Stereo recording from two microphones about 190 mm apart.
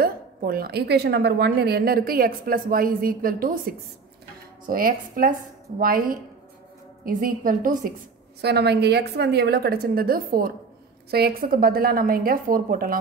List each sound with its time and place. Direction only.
0.0 s a woman's voice: 50° right (ahead or behind)
8.4 s a woman's voice: 60° right (ahead or behind)